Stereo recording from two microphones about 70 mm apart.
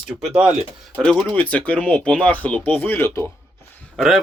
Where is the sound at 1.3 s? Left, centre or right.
Centre.